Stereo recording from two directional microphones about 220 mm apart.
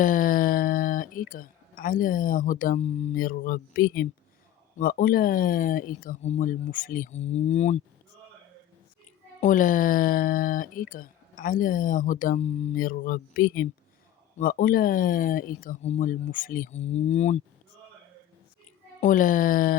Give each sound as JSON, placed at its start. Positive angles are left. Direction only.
{"t": 0.0, "sound": "speech", "side_deg": 40}
{"t": 9.4, "sound": "speech", "side_deg": 35}
{"t": 18.9, "sound": "speech", "side_deg": 35}